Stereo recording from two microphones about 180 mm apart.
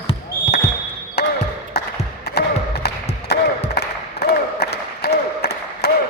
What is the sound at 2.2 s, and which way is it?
Music, 65° left (ahead or behind).